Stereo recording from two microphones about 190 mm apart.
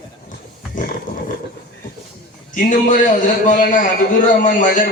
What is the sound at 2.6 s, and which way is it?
A man's voice, 45° left (ahead or behind).